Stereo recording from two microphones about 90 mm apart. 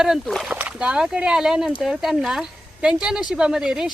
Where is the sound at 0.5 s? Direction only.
15° right (ahead or behind).